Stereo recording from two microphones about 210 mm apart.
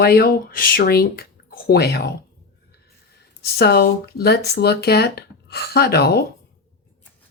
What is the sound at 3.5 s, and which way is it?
Speech, 50° left (ahead or behind).